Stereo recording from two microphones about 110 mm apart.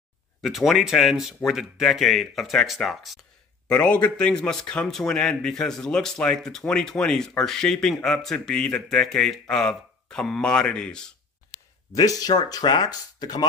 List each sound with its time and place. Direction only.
0.4 s a man's voice: centre (ahead or behind)
3.7 s a man's voice: 10° left (ahead or behind)
11.9 s speech: 35° left (ahead or behind)